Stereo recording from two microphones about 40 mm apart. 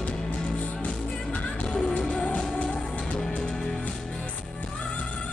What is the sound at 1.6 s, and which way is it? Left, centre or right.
Music, left.